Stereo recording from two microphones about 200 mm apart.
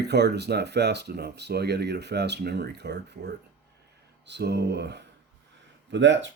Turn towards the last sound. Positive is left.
turn(degrees=-65)  # may be behind; listen again after turning